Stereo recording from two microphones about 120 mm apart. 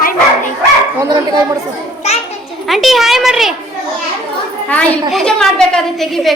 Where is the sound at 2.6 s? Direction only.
Centre (ahead or behind).